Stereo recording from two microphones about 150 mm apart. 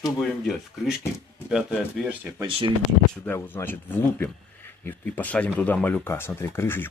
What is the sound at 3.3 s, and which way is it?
Speech, 15° left (ahead or behind).